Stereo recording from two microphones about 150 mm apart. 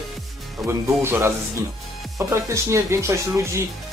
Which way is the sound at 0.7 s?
15° right (ahead or behind).